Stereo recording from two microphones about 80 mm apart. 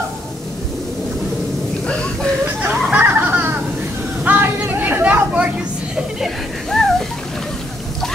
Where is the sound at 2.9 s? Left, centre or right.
Right.